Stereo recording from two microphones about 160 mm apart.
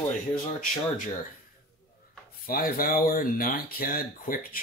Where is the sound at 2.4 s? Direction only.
65° left (ahead or behind).